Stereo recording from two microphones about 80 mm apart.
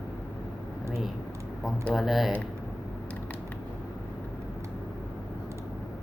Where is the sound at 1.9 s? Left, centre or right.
Centre.